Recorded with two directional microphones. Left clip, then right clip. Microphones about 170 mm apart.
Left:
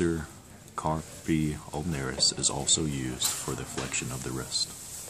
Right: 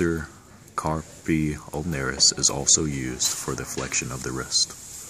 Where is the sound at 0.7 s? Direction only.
20° right (ahead or behind).